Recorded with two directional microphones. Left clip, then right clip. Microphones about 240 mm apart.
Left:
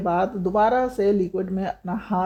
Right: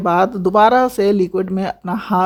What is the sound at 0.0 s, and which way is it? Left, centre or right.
Speech, right.